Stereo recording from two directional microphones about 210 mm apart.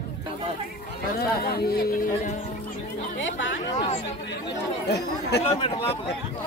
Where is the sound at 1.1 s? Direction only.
45° left (ahead or behind).